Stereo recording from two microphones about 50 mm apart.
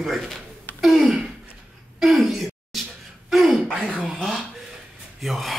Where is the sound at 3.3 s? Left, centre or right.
Centre.